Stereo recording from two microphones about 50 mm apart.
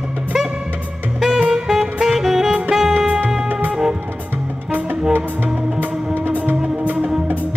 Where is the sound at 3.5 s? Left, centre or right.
Right.